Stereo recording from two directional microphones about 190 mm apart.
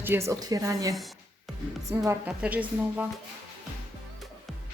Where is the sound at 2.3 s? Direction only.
5° right (ahead or behind).